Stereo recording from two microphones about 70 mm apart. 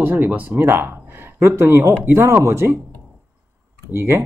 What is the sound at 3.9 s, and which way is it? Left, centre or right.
Speech, right.